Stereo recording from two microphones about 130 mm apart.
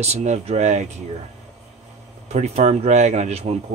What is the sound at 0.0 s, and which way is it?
Speech, 60° right (ahead or behind).